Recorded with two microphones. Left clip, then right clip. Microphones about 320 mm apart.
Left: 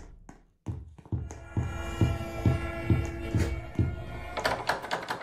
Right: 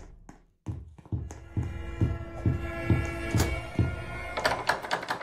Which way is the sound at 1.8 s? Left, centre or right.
Left.